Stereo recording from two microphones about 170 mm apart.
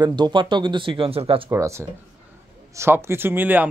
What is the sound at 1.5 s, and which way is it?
Speech, 15° right (ahead or behind).